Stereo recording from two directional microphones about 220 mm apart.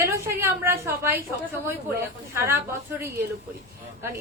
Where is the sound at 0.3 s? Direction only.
10° right (ahead or behind).